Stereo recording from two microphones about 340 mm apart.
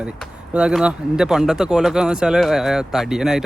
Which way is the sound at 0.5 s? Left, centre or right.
Centre.